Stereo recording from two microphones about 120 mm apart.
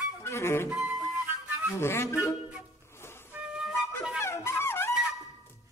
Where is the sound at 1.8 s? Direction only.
20° left (ahead or behind).